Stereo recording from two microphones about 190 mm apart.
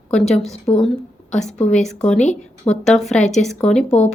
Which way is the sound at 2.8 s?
Centre (ahead or behind).